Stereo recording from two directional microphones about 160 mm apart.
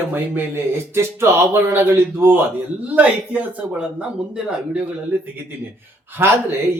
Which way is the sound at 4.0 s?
5° right (ahead or behind).